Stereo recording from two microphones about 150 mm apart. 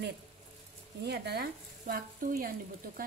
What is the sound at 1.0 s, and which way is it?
Speech, 90° right.